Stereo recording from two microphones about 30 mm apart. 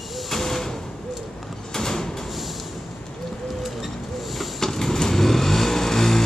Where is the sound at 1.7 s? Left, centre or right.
Centre.